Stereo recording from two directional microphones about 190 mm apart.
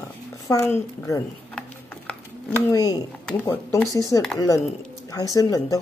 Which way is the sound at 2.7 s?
20° left (ahead or behind).